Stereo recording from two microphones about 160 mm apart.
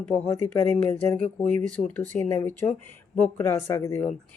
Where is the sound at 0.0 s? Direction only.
15° left (ahead or behind).